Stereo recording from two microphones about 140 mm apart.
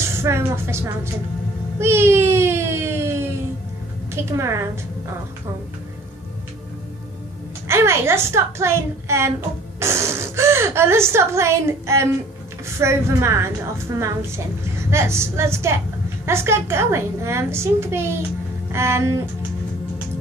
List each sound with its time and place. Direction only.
0.1 s a woman's voice: 20° right (ahead or behind)
1.8 s a sound: 20° right (ahead or behind)
4.1 s a woman's voice: 20° right (ahead or behind)
7.6 s a woman's voice: 20° right (ahead or behind)